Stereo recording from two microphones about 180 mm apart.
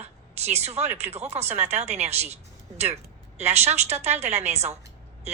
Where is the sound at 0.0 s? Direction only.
35° right (ahead or behind).